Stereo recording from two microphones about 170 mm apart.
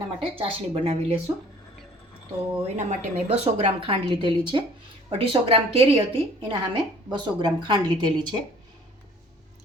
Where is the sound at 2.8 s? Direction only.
40° right (ahead or behind).